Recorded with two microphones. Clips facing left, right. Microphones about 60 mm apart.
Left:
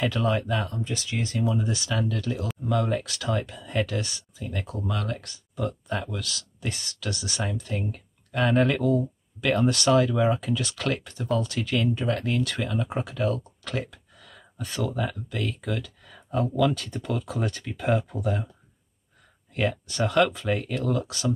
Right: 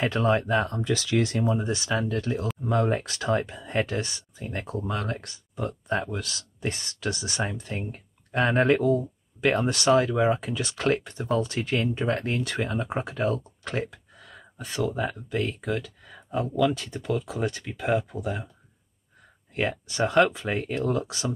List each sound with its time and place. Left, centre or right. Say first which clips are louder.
0.0 s speech: right 2 dB; right
0.8 s speech: right 6 dB; right
1.4 s speech: right 1 dB; right
4.4 s speech: right 1 dB; right
13.7 s a sound: right 2 dB; right
15.0 s speech: right 2 dB; right
15.6 s a sound: right 2 dB; centre
16.5 s speech: right 2 dB; centre
19.5 s speech: left 1 dB; right